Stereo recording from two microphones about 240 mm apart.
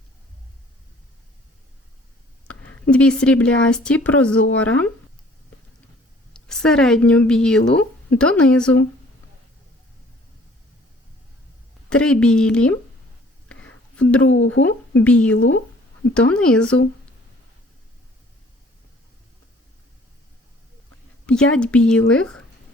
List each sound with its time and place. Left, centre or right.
2.5 s speech: centre
6.3 s a woman's voice: centre
11.9 s speech: centre
13.5 s whispering: centre
14.3 s speech: left
14.7 s speech: centre
21.2 s a woman's voice: centre